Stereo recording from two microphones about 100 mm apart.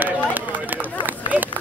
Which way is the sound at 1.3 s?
15° right (ahead or behind).